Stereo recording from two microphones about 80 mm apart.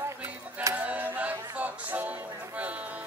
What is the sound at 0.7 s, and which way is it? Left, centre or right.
Music, centre.